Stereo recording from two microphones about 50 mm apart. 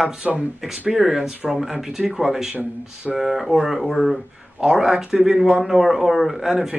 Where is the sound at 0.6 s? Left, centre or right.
Centre.